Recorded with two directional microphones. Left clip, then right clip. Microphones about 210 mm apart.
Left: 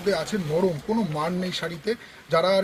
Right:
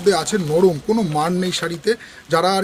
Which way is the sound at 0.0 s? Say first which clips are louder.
Right 8 dB; 60° right (ahead or behind).